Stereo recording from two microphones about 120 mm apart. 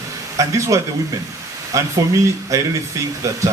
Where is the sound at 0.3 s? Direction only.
25° right (ahead or behind).